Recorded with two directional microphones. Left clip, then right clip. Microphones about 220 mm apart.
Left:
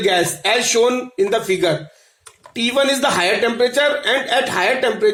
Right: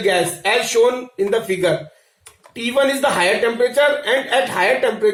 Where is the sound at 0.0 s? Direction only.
50° left (ahead or behind).